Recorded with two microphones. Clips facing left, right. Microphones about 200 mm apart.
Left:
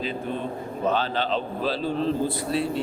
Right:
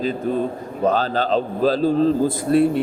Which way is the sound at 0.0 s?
40° right (ahead or behind).